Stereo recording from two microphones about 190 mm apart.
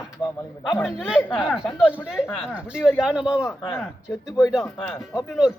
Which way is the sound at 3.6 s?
15° left (ahead or behind).